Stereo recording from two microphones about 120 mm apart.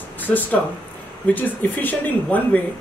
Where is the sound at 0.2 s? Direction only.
15° left (ahead or behind).